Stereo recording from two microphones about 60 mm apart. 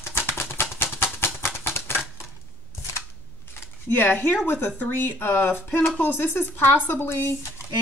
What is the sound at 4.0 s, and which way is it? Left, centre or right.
Speech, left.